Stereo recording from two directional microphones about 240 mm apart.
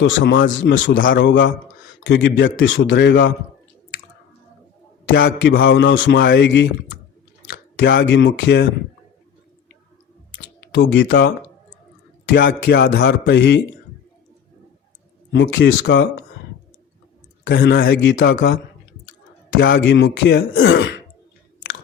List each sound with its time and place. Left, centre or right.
0.0 s a man's voice: left
5.0 s a man's voice: left
7.8 s a man's voice: left
10.8 s a man's voice: left
12.3 s a man's voice: left
15.3 s a man's voice: left
17.4 s a man's voice: left
19.5 s a sound: left
19.8 s a man's voice: left